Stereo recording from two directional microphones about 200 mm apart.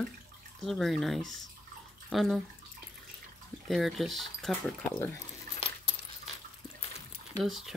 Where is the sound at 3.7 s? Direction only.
Centre (ahead or behind).